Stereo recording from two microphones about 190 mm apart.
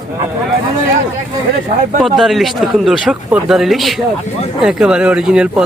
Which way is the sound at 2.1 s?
Centre (ahead or behind).